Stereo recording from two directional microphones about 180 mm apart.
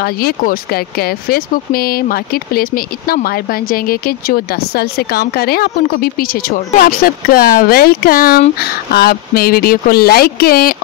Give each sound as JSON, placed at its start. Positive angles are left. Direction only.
{"t": 0.0, "sound": "speech", "side_deg": 55}